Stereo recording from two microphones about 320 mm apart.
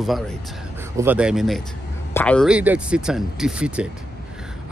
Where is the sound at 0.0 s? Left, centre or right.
Centre.